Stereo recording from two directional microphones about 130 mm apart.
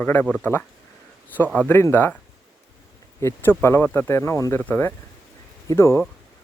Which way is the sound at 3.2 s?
20° left (ahead or behind).